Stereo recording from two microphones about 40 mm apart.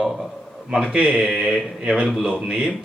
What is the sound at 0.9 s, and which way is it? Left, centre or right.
Speech, right.